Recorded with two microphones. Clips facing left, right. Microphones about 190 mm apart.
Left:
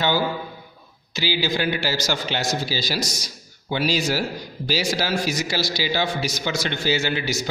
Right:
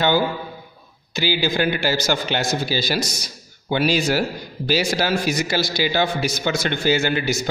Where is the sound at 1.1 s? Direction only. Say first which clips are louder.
Right 3 dB; 50° right (ahead or behind).